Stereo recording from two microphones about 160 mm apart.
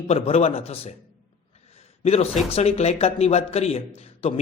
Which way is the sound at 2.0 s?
40° left (ahead or behind).